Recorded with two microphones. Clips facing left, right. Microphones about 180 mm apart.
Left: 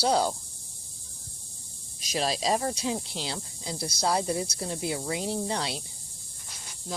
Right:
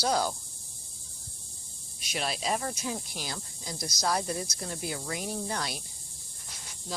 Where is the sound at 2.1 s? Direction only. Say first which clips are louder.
Left 5 dB; 35° left (ahead or behind).